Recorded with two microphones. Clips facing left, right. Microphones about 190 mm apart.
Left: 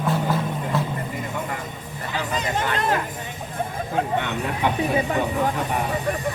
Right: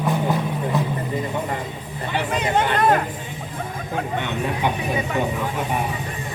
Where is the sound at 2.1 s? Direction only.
65° right (ahead or behind).